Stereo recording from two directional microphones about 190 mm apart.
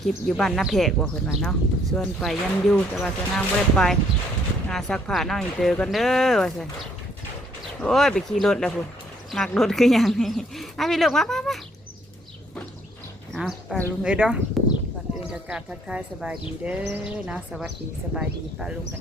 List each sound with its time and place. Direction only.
0.0 s speech: centre (ahead or behind)
7.8 s speech: centre (ahead or behind)
13.3 s speech: centre (ahead or behind)